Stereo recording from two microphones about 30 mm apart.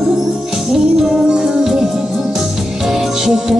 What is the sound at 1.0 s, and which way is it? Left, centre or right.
Music, right.